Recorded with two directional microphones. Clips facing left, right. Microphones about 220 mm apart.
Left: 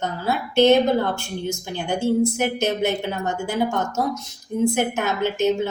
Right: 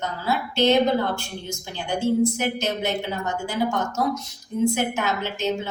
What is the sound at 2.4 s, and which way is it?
A woman's voice, 50° left (ahead or behind).